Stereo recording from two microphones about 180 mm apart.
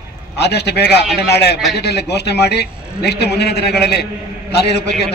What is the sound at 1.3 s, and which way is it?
A man's voice, 65° left (ahead or behind).